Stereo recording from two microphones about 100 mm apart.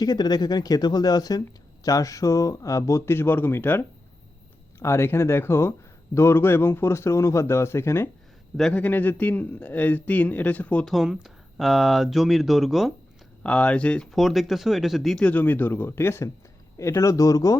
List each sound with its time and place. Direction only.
0.0 s speech: 45° left (ahead or behind); by 10.8 s 15° left (ahead or behind)
10.8 s speech: 5° right (ahead or behind)
13.4 s speech: 10° left (ahead or behind)
14.1 s speech: centre (ahead or behind); by 17.6 s 35° left (ahead or behind)